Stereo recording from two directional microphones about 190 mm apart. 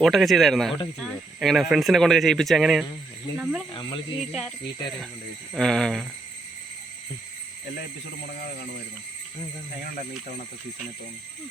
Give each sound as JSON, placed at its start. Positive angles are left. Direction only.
{"t": 0.0, "sound": "speech", "side_deg": 0}
{"t": 3.7, "sound": "speech", "side_deg": 25}
{"t": 4.2, "sound": "speech", "side_deg": 0}
{"t": 5.5, "sound": "speech", "side_deg": 0}